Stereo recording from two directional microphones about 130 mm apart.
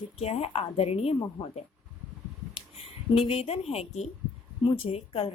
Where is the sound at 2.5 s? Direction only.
50° left (ahead or behind).